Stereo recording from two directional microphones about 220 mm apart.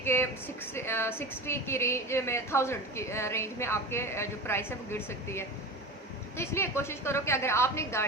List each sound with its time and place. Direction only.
0.0 s speech: 10° left (ahead or behind)